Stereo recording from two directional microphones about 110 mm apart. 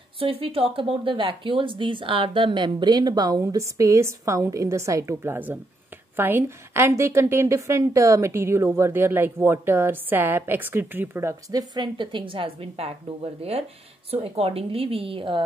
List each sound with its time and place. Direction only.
0.2 s a woman's voice: 55° right (ahead or behind); by 11.6 s 25° right (ahead or behind)
11.7 s a woman's voice: 45° right (ahead or behind)